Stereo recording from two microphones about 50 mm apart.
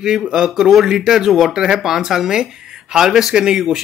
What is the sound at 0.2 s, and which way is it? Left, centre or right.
Speech, centre.